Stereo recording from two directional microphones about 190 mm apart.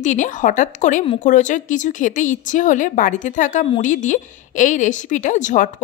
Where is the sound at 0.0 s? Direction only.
40° left (ahead or behind).